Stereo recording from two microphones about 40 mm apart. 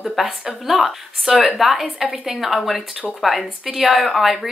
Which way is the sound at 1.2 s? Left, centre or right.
Centre.